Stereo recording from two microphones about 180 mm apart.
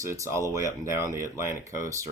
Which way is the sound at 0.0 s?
15° right (ahead or behind).